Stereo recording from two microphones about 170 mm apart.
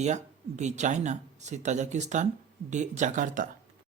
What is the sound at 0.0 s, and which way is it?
Speech, 45° right (ahead or behind).